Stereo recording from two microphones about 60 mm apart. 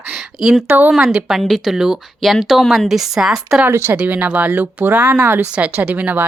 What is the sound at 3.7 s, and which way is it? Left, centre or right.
Speech, right.